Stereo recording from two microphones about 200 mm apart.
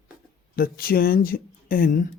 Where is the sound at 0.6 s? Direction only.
50° left (ahead or behind).